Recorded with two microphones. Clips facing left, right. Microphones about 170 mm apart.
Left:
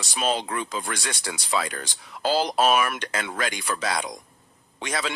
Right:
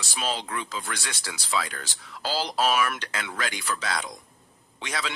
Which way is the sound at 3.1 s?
50° left (ahead or behind).